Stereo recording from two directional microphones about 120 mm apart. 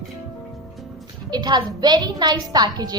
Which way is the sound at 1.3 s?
40° right (ahead or behind).